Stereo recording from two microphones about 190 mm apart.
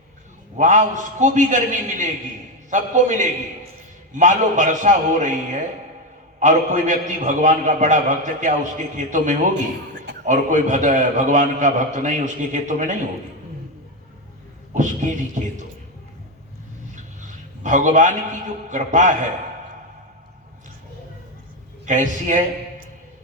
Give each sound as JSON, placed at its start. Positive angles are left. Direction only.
{"t": 0.5, "sound": "a man's voice", "side_deg": -40}
{"t": 14.7, "sound": "a man's voice", "side_deg": -40}
{"t": 16.9, "sound": "a man's voice", "side_deg": -40}
{"t": 21.8, "sound": "a man's voice", "side_deg": -40}